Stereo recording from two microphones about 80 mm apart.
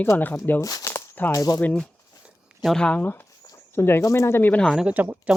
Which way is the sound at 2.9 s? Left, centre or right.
Left.